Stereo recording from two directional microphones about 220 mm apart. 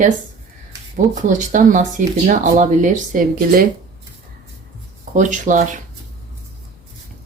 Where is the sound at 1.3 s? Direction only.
35° right (ahead or behind).